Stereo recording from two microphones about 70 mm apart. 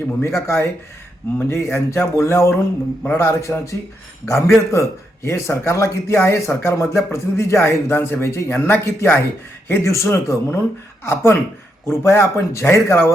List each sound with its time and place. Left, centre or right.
0.2 s speech: left